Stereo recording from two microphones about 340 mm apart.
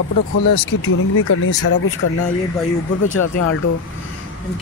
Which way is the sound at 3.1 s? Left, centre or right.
Left.